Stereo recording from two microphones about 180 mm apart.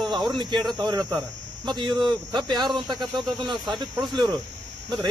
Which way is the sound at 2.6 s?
Centre (ahead or behind).